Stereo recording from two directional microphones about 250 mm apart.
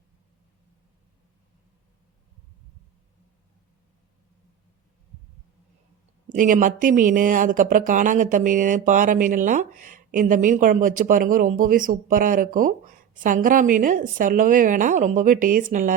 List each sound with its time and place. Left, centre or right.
6.2 s speech: right